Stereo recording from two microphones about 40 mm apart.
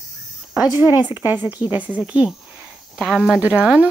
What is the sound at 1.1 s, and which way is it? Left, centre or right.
Speech, right.